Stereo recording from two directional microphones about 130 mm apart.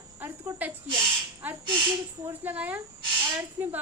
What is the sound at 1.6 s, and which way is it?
Speech, 35° right (ahead or behind).